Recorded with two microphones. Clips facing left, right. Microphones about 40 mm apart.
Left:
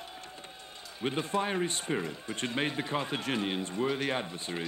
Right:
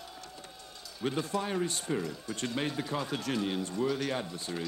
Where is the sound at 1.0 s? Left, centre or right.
Left.